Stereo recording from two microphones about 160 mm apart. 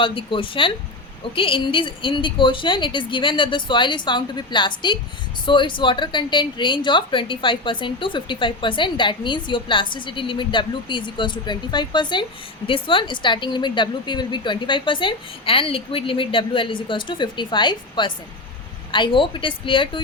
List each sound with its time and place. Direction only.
0.0 s a woman's voice: 35° left (ahead or behind)